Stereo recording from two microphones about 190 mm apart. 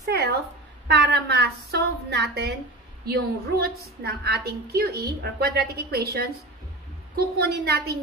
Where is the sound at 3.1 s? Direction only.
55° right (ahead or behind).